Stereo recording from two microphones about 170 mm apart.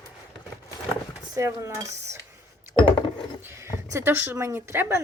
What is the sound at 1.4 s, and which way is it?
Speech, 15° right (ahead or behind).